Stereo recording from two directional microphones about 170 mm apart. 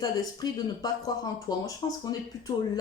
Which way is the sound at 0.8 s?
25° left (ahead or behind).